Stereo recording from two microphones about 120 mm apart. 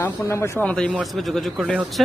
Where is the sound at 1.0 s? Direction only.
Centre (ahead or behind).